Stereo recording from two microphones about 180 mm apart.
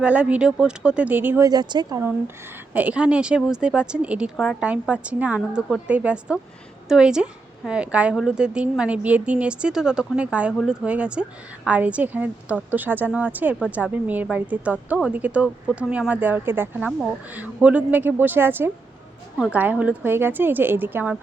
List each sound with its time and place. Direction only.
0.0 s a woman's voice: 5° right (ahead or behind)
2.7 s a woman's voice: 10° right (ahead or behind)